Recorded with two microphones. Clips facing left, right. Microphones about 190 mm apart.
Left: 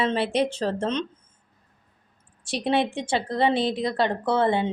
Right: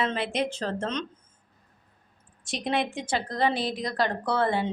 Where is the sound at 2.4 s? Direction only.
35° left (ahead or behind).